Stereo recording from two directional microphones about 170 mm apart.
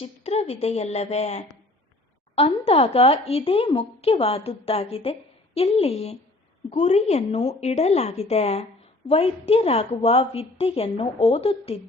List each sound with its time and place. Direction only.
0.0 s speech: 35° left (ahead or behind)